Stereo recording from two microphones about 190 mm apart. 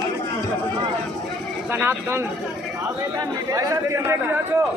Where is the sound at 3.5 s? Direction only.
15° right (ahead or behind).